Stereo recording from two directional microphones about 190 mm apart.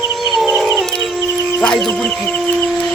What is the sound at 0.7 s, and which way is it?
Howl, centre (ahead or behind).